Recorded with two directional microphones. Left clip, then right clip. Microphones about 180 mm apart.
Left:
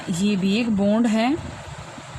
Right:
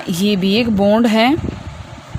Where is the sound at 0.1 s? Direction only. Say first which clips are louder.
Right 7 dB; 50° right (ahead or behind).